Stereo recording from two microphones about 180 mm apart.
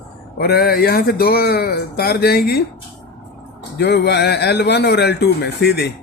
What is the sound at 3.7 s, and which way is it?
Speech, 65° left (ahead or behind).